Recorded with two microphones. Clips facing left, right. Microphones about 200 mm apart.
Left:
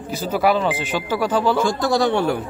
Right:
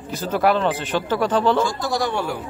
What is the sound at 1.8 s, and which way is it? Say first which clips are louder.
Speech: left 5 dB; 65° left (ahead or behind).